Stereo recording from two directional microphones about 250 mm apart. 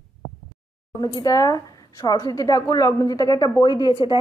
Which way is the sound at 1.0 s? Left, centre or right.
Centre.